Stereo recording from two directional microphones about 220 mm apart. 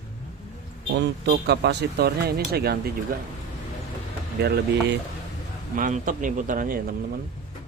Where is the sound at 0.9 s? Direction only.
50° right (ahead or behind).